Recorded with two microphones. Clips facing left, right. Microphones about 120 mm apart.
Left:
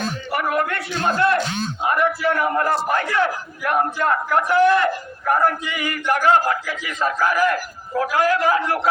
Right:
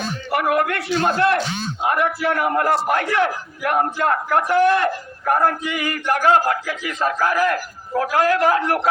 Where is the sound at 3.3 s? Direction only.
45° right (ahead or behind).